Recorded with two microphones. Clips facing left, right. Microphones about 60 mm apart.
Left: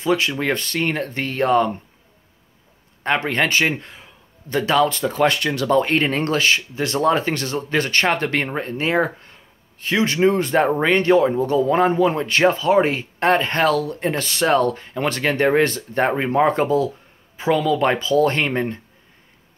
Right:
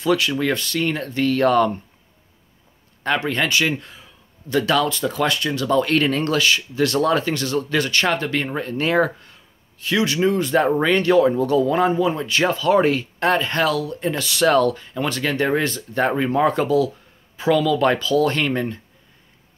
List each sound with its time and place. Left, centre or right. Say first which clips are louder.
0.0 s speech: right 1 dB; left
3.2 s a man's voice: left 2 dB; left
4.6 s speech: left 1 dB; left
4.8 s speech: left 3 dB; left
5.9 s speech: even; left
8.5 s speech: even; left
8.7 s speech: right 1 dB; left
9.2 s speech: left 1 dB; left
11.9 s speech: left 2 dB; left
12.4 s speech: left 1 dB; left
14.4 s speech: right 1 dB; left